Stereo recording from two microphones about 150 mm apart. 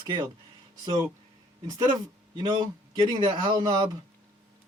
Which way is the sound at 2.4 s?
30° right (ahead or behind).